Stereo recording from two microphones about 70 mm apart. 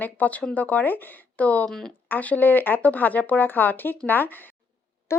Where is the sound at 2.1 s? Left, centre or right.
Left.